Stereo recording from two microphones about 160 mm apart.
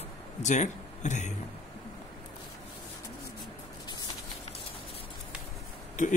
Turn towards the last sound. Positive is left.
turn(degrees=55)  # may be behind; listen again after turning